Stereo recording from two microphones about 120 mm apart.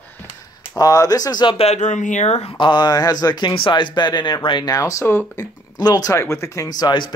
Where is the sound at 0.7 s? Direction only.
30° left (ahead or behind).